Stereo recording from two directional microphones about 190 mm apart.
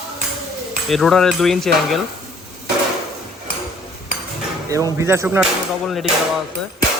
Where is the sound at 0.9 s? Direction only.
Centre (ahead or behind).